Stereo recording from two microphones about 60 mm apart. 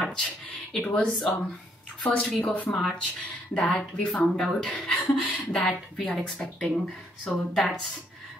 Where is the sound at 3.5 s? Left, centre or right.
Left.